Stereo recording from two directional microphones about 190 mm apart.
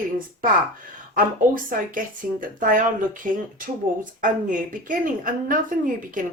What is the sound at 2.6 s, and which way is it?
A woman's voice, 45° right (ahead or behind).